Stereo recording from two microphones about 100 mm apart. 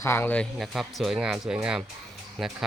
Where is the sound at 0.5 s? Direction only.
Centre (ahead or behind).